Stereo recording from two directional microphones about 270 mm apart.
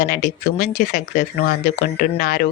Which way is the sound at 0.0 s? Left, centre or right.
Left.